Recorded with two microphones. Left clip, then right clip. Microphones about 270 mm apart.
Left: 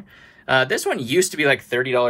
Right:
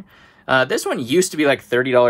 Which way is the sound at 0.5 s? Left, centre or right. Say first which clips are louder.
Right 1 dB; centre.